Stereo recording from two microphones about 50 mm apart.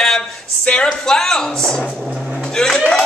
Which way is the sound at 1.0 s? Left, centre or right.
Centre.